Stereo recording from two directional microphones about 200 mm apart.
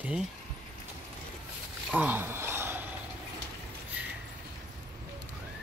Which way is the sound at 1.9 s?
5° right (ahead or behind).